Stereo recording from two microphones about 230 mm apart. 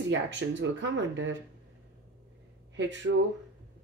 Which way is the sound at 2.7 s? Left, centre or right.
Right.